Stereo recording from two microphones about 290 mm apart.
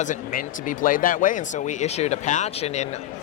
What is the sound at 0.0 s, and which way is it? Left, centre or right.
Speech, left.